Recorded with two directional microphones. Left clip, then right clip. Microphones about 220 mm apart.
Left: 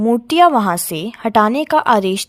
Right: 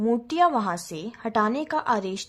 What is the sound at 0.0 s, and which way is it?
A woman's voice, 35° left (ahead or behind).